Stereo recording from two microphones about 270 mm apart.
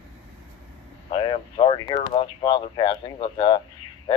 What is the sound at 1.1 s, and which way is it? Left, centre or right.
Speech, centre.